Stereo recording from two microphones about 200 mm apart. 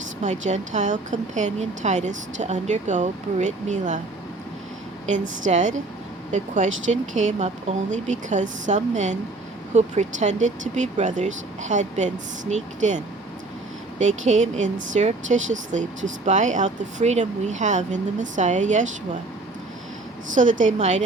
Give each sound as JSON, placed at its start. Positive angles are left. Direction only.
{"t": 0.2, "sound": "a woman's voice", "side_deg": -35}
{"t": 5.0, "sound": "a woman's voice", "side_deg": -40}
{"t": 6.7, "sound": "speech", "side_deg": -75}
{"t": 7.2, "sound": "a woman's voice", "side_deg": -35}
{"t": 14.0, "sound": "a woman's voice", "side_deg": -35}
{"t": 20.3, "sound": "a woman's voice", "side_deg": -40}